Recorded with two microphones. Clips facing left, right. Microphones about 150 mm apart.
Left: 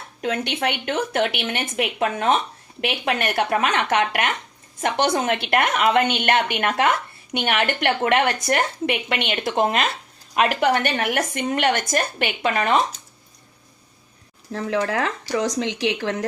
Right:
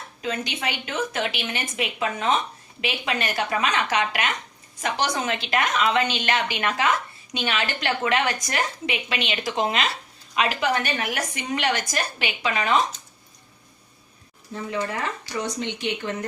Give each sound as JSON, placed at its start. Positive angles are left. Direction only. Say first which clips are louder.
{"t": 0.2, "sound": "a woman's voice", "louder": "left 5 dB", "side_deg": 65}
{"t": 14.5, "sound": "speech", "louder": "left 5 dB", "side_deg": 85}